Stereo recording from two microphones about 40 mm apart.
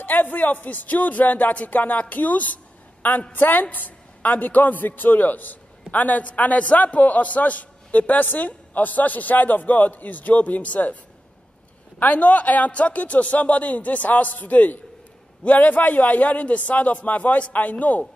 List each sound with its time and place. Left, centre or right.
0.0 s a man's voice: left
1.5 s a man's voice: left
12.0 s a man's voice: left